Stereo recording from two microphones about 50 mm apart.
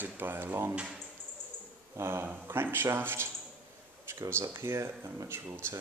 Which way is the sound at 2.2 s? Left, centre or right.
Right.